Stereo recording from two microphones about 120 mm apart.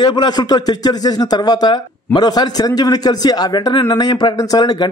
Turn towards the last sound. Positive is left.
turn(degrees=35)  # may be behind; listen again after turning